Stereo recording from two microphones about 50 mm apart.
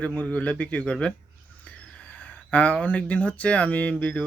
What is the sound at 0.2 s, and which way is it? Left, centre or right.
Speech, left.